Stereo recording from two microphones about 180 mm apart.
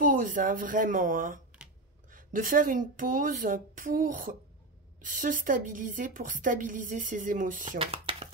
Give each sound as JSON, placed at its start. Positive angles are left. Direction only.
{"t": 0.0, "sound": "a woman's voice", "side_deg": -50}
{"t": 7.8, "sound": "speech", "side_deg": -35}